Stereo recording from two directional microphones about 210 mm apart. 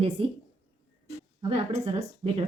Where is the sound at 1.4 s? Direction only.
30° right (ahead or behind).